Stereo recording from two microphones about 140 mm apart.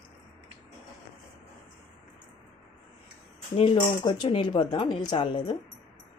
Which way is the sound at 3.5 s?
35° left (ahead or behind).